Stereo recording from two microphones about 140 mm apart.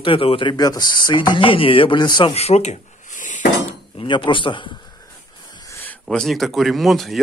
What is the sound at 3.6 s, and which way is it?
Dishes, 40° left (ahead or behind).